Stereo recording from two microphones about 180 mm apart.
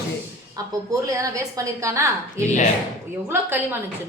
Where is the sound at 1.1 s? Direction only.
15° right (ahead or behind).